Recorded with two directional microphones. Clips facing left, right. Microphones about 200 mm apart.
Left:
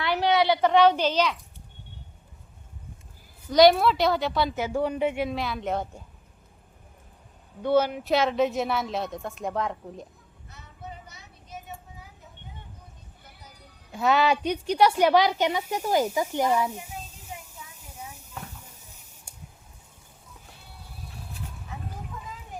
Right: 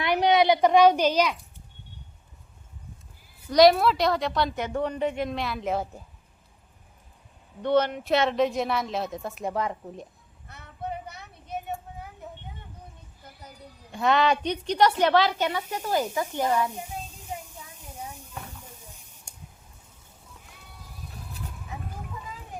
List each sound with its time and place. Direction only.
0.0 s speech: 15° right (ahead or behind)
3.5 s speech: centre (ahead or behind)
7.6 s speech: 5° left (ahead or behind)
10.5 s vehicle: 60° right (ahead or behind)
13.9 s a woman's voice: 5° left (ahead or behind)